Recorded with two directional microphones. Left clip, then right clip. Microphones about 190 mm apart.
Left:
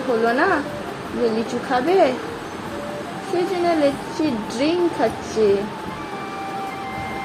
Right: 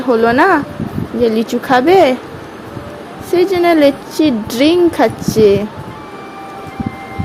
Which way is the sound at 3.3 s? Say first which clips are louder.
Right 9 dB; 65° right (ahead or behind).